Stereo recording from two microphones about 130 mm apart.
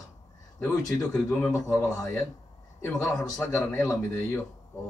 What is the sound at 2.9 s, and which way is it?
Speech, centre (ahead or behind).